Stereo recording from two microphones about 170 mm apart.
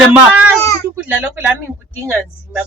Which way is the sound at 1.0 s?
5° right (ahead or behind).